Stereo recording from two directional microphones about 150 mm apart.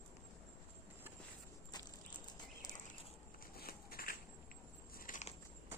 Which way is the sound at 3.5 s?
85° left.